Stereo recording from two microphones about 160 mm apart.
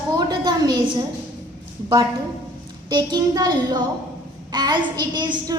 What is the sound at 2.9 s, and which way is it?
A woman's voice, 25° right (ahead or behind).